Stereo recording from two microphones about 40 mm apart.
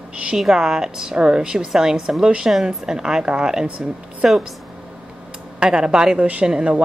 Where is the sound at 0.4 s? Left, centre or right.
Centre.